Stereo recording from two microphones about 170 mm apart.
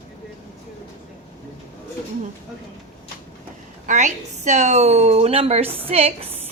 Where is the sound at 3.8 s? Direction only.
45° right (ahead or behind).